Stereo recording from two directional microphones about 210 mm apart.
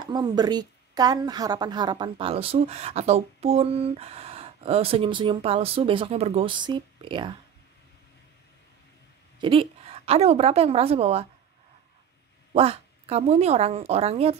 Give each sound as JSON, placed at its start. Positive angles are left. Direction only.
{"t": 0.0, "sound": "a woman's voice", "side_deg": -20}
{"t": 9.4, "sound": "a woman's voice", "side_deg": -25}
{"t": 12.5, "sound": "a woman's voice", "side_deg": -30}